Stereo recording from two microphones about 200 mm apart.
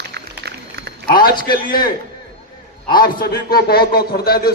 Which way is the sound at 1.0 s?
45° left (ahead or behind).